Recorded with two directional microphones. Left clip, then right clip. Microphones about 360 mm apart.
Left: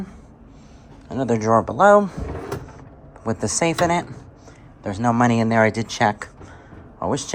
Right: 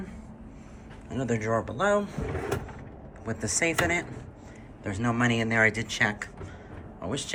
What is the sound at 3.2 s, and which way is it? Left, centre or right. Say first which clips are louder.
Speech: left 7 dB; centre.